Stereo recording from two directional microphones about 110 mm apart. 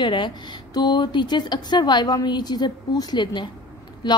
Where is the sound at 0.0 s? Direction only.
45° left (ahead or behind).